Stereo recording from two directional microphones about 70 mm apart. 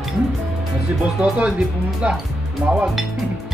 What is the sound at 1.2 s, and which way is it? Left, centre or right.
Speech, centre.